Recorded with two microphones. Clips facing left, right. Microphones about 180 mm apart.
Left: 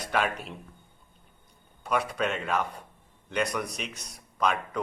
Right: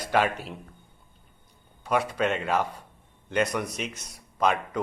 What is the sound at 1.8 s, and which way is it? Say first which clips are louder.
Speech: right 3 dB; centre (ahead or behind).